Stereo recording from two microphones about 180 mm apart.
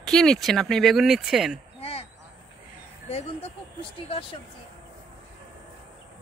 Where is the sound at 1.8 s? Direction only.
35° left (ahead or behind).